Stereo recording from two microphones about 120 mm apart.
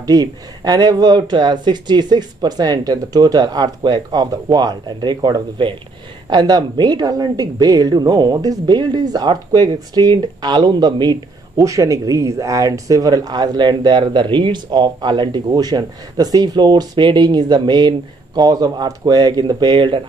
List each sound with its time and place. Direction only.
0.0 s speech: 35° right (ahead or behind)